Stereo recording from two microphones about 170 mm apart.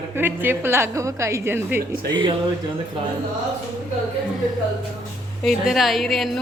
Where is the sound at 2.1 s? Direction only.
30° right (ahead or behind).